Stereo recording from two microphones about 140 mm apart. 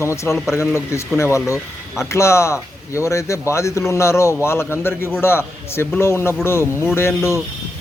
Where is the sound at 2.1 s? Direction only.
20° left (ahead or behind).